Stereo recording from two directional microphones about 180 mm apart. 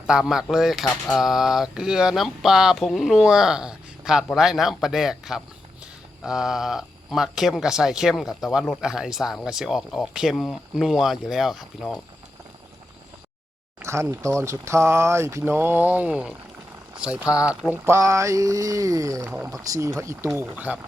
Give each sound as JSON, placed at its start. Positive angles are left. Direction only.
{"t": 0.1, "sound": "speech", "side_deg": -5}
{"t": 13.8, "sound": "speech", "side_deg": -15}